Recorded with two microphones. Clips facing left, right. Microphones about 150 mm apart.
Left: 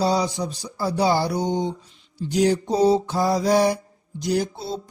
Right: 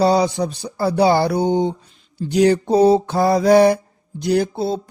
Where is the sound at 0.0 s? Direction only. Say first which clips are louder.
Right 6 dB; 60° right (ahead or behind).